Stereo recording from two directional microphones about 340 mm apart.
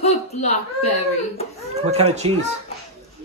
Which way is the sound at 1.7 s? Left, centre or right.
Centre.